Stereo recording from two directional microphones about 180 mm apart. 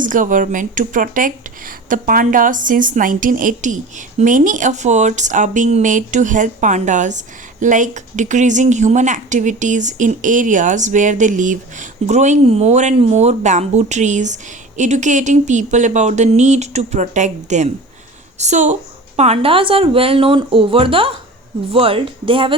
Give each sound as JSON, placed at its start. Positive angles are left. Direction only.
{"t": 0.0, "sound": "speech", "side_deg": -45}